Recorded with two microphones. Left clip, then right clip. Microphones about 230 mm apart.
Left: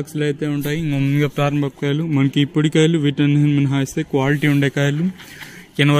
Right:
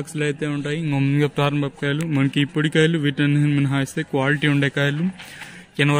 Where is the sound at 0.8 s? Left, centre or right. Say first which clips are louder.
Right 1 dB; centre.